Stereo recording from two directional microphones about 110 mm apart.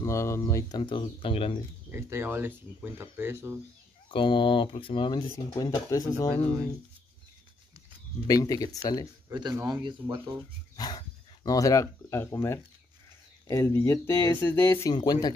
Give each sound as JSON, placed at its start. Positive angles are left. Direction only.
{"t": 0.0, "sound": "speech", "side_deg": 25}
{"t": 1.9, "sound": "speech", "side_deg": -25}
{"t": 4.1, "sound": "speech", "side_deg": 50}
{"t": 5.3, "sound": "speech", "side_deg": 30}
{"t": 8.3, "sound": "speech", "side_deg": 35}
{"t": 9.3, "sound": "speech", "side_deg": -35}
{"t": 10.8, "sound": "speech", "side_deg": 40}
{"t": 14.9, "sound": "speech", "side_deg": 35}